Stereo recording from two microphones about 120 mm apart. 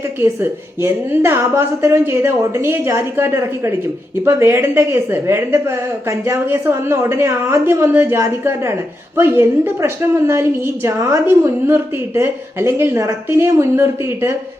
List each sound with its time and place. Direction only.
0.2 s a woman's voice: 20° right (ahead or behind)